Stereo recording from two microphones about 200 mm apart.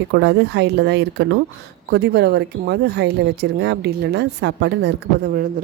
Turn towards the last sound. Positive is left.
turn(degrees=-60)  # may be behind; listen again after turning